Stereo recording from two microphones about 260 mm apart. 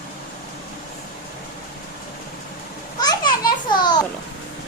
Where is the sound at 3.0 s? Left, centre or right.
Centre.